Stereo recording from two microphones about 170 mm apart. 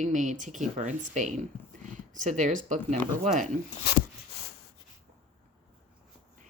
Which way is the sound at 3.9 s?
75° left (ahead or behind).